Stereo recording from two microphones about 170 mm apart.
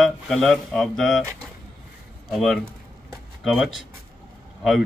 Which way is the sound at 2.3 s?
Centre (ahead or behind).